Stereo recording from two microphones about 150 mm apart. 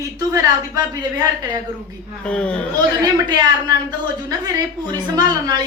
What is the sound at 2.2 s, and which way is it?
Speech, 5° left (ahead or behind).